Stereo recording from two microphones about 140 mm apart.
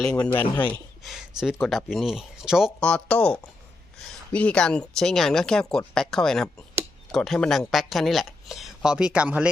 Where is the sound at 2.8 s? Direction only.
5° left (ahead or behind).